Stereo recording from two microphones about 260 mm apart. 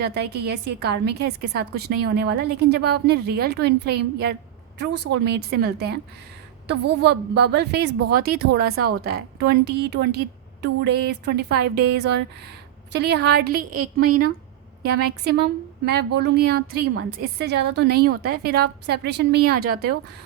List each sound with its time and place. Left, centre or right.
0.0 s a woman's voice: right
14.0 s a woman's voice: right
14.8 s a woman's voice: right